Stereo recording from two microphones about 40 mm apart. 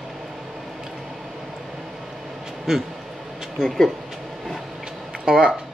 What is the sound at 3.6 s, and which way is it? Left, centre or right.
Speech, centre.